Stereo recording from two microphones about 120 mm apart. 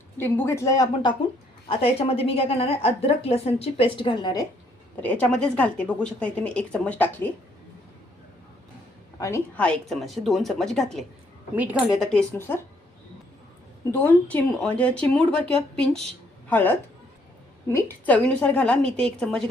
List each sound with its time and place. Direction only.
0.2 s speech: 20° left (ahead or behind)
1.6 s a woman's voice: 50° left (ahead or behind)
4.9 s speech: 10° left (ahead or behind)
9.1 s a woman's voice: 25° left (ahead or behind)
9.6 s a woman's voice: 10° left (ahead or behind)
11.5 s a woman's voice: 10° right (ahead or behind)
11.9 s speech: 5° left (ahead or behind)
13.9 s a woman's voice: 15° left (ahead or behind)